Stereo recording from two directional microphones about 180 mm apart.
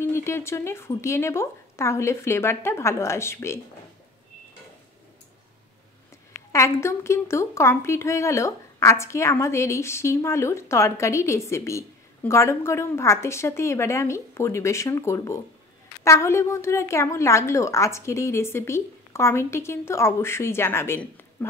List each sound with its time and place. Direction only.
0.0 s a woman's voice: 15° left (ahead or behind)
6.5 s a woman's voice: 15° left (ahead or behind)